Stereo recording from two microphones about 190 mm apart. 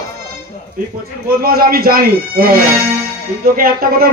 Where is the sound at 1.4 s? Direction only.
50° right (ahead or behind).